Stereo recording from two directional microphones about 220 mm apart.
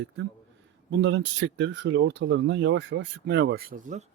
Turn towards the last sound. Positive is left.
turn(degrees=-35)  # may be behind; listen again after turning